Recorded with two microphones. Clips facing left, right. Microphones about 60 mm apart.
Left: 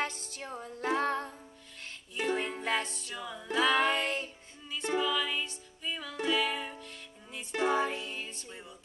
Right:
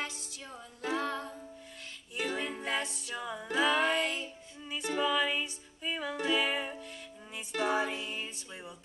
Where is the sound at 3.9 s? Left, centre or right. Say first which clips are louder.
Even; left.